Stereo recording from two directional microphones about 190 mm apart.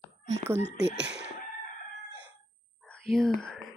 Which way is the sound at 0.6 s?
65° right (ahead or behind).